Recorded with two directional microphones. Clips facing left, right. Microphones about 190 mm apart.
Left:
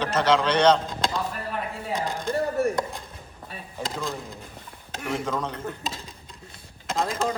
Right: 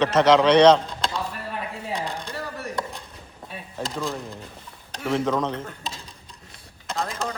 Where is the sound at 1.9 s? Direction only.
45° left (ahead or behind).